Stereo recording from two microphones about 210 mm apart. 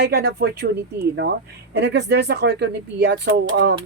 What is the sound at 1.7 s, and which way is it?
A woman's voice, 55° right (ahead or behind).